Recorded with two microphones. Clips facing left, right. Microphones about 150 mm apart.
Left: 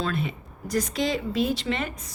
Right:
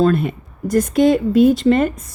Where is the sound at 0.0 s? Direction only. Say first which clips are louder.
Right 13 dB; 50° right (ahead or behind).